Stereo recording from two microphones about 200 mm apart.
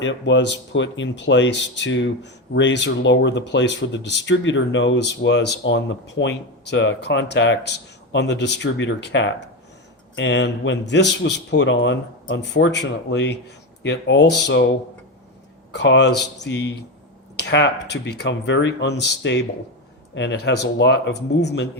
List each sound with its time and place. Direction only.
0.0 s speech: 65° left (ahead or behind)
15.7 s speech: 60° left (ahead or behind)